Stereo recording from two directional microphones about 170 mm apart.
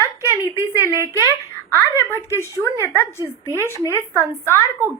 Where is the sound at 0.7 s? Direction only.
15° right (ahead or behind).